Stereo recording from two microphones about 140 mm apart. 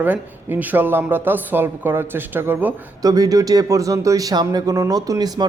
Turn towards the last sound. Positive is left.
turn(degrees=-30)  # may be behind; listen again after turning